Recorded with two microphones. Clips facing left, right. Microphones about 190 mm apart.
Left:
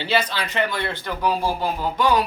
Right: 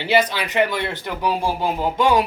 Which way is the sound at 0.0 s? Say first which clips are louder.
Right 4 dB; 15° right (ahead or behind).